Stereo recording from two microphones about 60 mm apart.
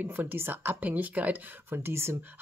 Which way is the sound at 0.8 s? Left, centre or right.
Right.